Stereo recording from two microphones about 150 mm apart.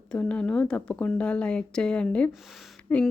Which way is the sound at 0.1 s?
5° left (ahead or behind).